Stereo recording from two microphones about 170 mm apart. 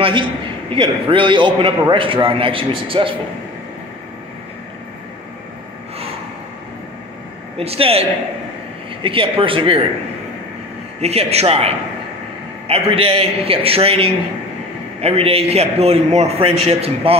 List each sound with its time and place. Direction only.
0.0 s a man's voice: 30° right (ahead or behind)
7.5 s a man's voice: 35° right (ahead or behind)
11.0 s a man's voice: 40° right (ahead or behind)